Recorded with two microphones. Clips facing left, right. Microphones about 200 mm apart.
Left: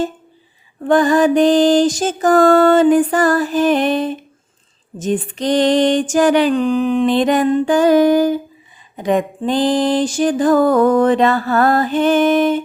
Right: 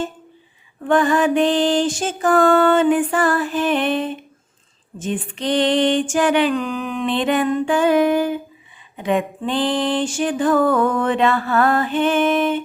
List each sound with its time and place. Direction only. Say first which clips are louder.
0.9 s music: left 4 dB; 35° left (ahead or behind)